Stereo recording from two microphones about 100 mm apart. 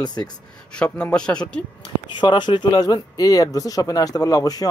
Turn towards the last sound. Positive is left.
turn(degrees=40)  # may be behind; listen again after turning